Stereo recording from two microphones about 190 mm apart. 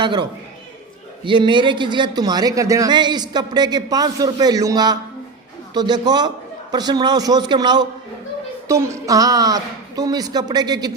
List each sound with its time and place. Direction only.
0.0 s a man's voice: 25° right (ahead or behind)